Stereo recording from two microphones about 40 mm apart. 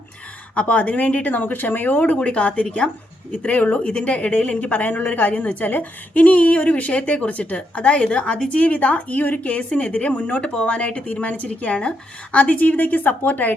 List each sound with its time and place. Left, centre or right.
0.5 s speech: left
2.2 s a woman's voice: left
3.8 s a woman's voice: left
10.7 s a woman's voice: left